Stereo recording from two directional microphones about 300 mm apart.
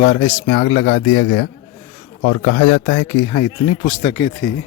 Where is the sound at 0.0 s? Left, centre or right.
Left.